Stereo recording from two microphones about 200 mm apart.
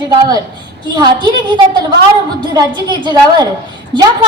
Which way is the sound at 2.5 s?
20° right (ahead or behind).